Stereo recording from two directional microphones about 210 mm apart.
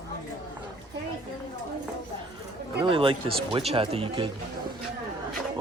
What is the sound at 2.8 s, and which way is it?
Speech, 25° right (ahead or behind).